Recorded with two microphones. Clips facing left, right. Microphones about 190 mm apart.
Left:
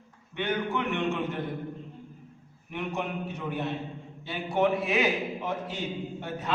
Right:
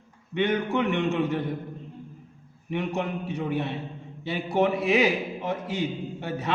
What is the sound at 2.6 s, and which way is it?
A man's voice, 70° right (ahead or behind).